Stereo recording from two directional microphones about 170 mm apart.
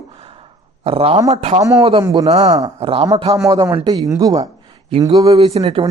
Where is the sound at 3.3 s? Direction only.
20° right (ahead or behind).